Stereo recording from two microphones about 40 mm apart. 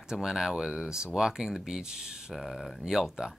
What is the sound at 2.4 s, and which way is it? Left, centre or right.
Speech, centre.